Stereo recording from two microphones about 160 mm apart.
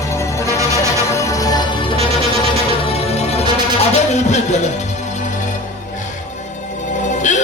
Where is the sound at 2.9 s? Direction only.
40° left (ahead or behind).